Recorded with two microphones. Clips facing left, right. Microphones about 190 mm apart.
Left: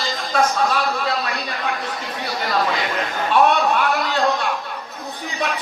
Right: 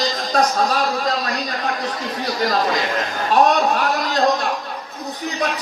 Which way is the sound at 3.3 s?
40° right (ahead or behind).